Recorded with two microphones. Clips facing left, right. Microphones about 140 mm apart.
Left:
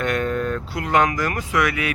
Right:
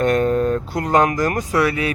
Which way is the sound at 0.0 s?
40° right (ahead or behind).